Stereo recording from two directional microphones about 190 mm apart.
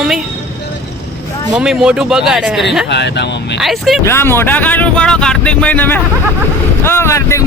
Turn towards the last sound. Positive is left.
turn(degrees=15)  # may be behind; listen again after turning